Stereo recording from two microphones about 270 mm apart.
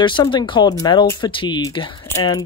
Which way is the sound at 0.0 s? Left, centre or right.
Centre.